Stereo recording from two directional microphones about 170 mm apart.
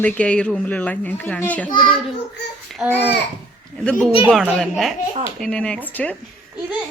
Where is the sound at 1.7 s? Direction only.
30° left (ahead or behind).